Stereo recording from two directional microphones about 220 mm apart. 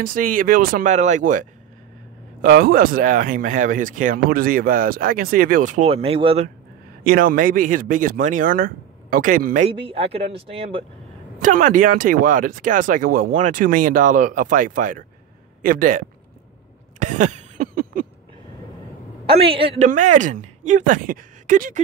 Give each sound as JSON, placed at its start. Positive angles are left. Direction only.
{"t": 0.0, "sound": "speech", "side_deg": -40}
{"t": 7.1, "sound": "speech", "side_deg": -40}
{"t": 11.4, "sound": "speech", "side_deg": -35}
{"t": 17.0, "sound": "cough", "side_deg": -35}
{"t": 19.2, "sound": "speech", "side_deg": -25}